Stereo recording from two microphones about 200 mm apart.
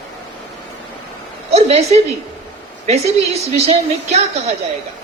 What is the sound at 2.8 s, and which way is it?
A woman's voice, 35° right (ahead or behind).